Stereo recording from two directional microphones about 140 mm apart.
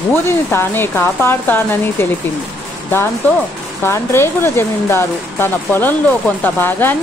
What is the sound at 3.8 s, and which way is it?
A woman's voice, 20° left (ahead or behind).